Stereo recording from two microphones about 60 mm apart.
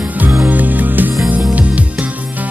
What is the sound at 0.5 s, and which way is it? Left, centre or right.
Music, right.